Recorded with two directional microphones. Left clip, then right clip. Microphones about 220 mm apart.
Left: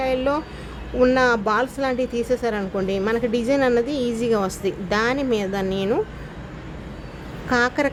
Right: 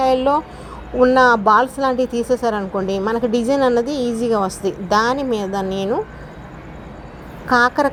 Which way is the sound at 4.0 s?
20° left (ahead or behind).